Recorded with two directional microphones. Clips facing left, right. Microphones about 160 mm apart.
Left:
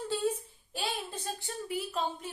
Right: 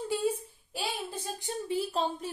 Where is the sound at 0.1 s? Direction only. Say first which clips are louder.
Right 1 dB; 10° right (ahead or behind).